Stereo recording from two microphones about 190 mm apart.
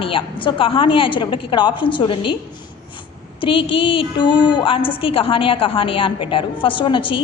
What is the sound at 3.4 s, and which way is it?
A woman's voice, 25° left (ahead or behind).